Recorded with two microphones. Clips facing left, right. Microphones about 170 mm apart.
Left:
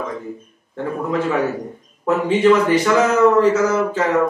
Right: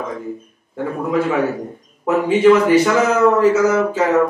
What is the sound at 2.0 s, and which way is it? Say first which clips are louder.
A man's voice: right 2 dB; 10° right (ahead or behind).